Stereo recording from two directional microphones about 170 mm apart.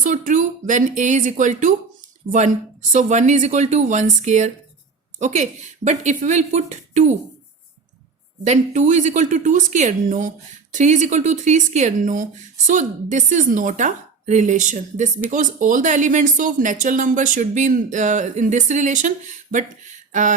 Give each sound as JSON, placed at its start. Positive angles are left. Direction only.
{"t": 0.0, "sound": "a woman's voice", "side_deg": -50}
{"t": 2.9, "sound": "a woman's voice", "side_deg": -45}
{"t": 8.4, "sound": "a woman's voice", "side_deg": -45}